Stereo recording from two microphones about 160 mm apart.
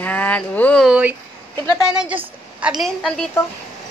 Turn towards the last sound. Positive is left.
turn(degrees=0)  # may be behind; listen again after turning